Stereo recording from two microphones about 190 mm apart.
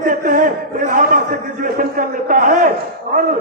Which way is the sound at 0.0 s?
45° right (ahead or behind).